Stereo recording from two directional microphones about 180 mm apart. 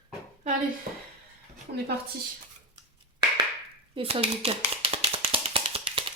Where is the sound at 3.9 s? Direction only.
30° right (ahead or behind).